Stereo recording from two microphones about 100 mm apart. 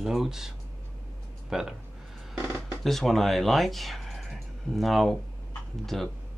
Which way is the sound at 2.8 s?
5° left (ahead or behind).